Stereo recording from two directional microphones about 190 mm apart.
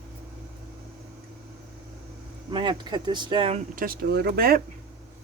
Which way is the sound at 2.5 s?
25° right (ahead or behind).